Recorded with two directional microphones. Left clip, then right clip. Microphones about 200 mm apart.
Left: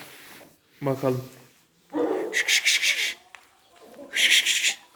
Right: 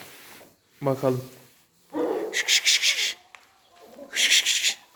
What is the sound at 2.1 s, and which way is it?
Rub, 20° right (ahead or behind).